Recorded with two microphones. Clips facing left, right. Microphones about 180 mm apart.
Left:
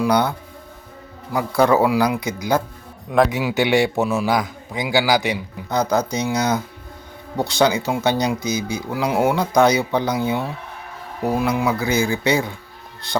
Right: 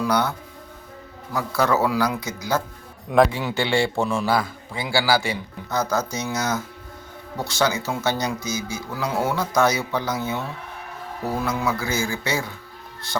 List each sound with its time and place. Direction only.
0.0 s speech: 15° left (ahead or behind)
3.1 s a man's voice: centre (ahead or behind)
3.5 s speech: 15° left (ahead or behind)
4.0 s a man's voice: 5° left (ahead or behind)
4.3 s speech: 15° left (ahead or behind)